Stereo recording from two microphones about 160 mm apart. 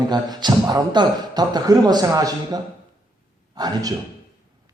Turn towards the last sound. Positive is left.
turn(degrees=-25)  # may be behind; listen again after turning